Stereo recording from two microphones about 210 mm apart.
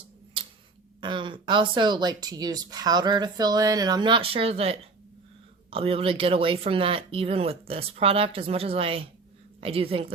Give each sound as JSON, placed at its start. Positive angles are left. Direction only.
{"t": 0.4, "sound": "tick-tock", "side_deg": -25}
{"t": 1.0, "sound": "speech", "side_deg": -20}